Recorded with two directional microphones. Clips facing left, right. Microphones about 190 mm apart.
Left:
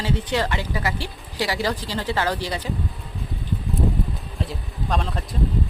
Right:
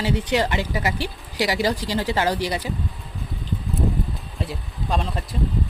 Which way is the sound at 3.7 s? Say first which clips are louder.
Left 1 dB; centre (ahead or behind).